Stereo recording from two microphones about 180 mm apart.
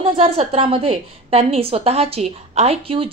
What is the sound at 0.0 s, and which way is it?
A woman's voice, 25° right (ahead or behind).